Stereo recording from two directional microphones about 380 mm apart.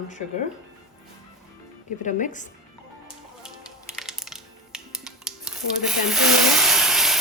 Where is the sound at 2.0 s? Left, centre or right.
Centre.